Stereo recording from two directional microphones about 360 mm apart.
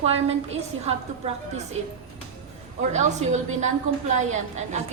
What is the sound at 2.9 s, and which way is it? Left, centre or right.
A woman's voice, centre.